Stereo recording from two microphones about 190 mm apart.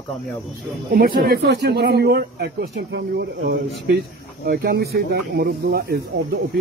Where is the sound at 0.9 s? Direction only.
55° right (ahead or behind).